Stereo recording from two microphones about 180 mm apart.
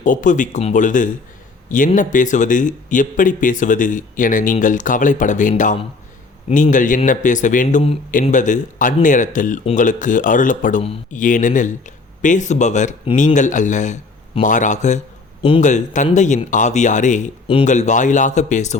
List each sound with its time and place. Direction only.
0.0 s speech: 45° left (ahead or behind)